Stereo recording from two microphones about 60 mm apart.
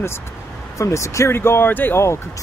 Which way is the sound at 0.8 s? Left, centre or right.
Left.